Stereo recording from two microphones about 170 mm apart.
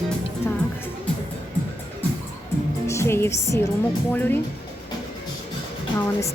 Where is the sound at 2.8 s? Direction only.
15° left (ahead or behind).